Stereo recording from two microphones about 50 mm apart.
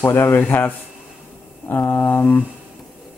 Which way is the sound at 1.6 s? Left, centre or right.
Left.